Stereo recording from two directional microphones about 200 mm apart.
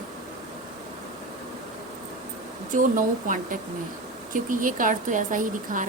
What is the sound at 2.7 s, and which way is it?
A woman's voice, 40° right (ahead or behind).